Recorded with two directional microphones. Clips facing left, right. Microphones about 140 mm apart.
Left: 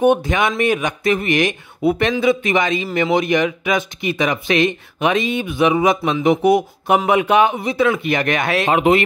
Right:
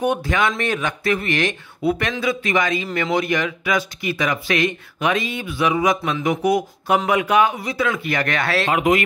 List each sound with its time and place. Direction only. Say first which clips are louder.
0.0 s speech: left 5 dB; 20° left (ahead or behind)
8.7 s speech: left 4 dB; 30° left (ahead or behind)